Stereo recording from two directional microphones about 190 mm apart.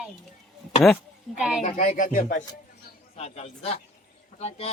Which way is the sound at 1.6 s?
40° left (ahead or behind).